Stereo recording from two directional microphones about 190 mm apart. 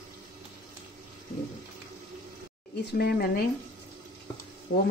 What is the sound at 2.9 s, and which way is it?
Speech, 55° left (ahead or behind).